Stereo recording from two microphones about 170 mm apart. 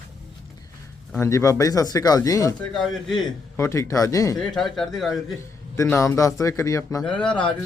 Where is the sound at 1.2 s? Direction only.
15° left (ahead or behind).